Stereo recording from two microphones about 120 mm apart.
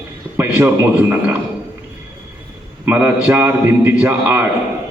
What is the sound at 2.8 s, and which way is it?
A man's voice, 15° right (ahead or behind).